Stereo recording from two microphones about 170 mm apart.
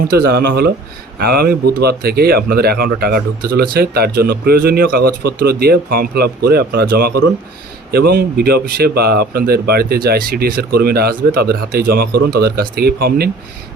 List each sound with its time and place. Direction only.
0.0 s speech: 65° right (ahead or behind)